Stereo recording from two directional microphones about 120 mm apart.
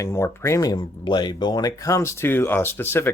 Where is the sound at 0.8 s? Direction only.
40° left (ahead or behind).